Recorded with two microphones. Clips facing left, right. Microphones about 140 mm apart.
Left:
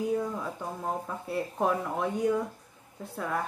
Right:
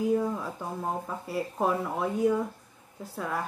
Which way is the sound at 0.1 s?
5° right (ahead or behind).